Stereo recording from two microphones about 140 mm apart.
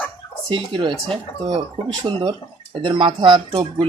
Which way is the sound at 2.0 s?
30° right (ahead or behind).